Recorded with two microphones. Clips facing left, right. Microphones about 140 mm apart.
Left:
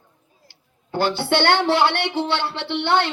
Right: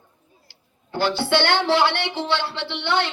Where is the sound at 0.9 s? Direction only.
55° left (ahead or behind).